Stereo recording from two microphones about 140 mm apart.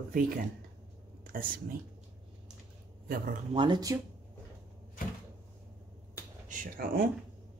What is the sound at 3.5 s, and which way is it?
Speech, 35° right (ahead or behind).